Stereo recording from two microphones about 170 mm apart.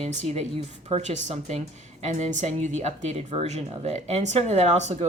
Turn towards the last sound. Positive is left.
turn(degrees=-40)  # may be behind; listen again after turning